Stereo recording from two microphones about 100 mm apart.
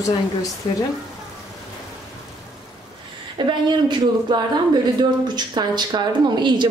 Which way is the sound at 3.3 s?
50° right (ahead or behind).